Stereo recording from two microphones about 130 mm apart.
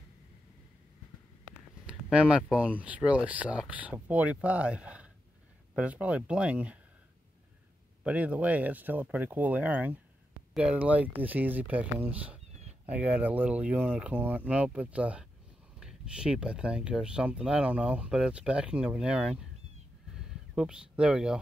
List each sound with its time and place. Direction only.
1.9 s speech: 10° right (ahead or behind)
8.0 s speech: 10° right (ahead or behind)
20.2 s a sound: 5° right (ahead or behind)